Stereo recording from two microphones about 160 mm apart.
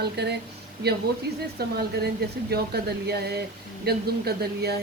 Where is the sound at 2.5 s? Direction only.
80° right.